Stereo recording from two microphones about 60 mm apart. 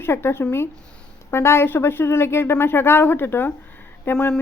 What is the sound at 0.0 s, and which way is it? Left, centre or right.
Speech, left.